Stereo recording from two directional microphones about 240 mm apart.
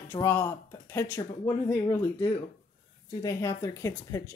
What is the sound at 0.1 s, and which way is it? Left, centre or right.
Speech, centre.